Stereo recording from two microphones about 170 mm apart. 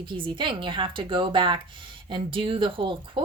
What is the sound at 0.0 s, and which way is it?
A woman's voice, 30° right (ahead or behind).